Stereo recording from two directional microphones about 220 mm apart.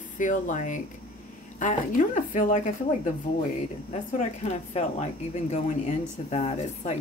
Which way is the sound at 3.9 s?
30° left (ahead or behind).